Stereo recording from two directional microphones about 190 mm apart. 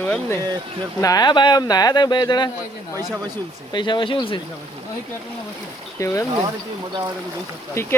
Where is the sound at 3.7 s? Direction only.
25° left (ahead or behind).